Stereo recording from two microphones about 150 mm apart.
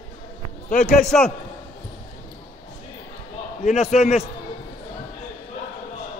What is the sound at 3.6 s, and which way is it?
Speech, 50° left (ahead or behind).